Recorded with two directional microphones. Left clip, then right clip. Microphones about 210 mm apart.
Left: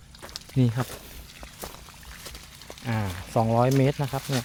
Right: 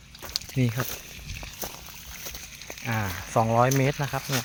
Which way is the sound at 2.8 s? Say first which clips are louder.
Right 2 dB; 30° left (ahead or behind).